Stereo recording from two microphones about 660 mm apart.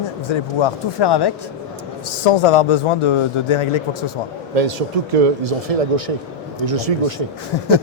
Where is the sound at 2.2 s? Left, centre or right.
Left.